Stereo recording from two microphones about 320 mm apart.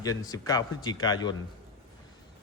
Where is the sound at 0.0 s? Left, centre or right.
Centre.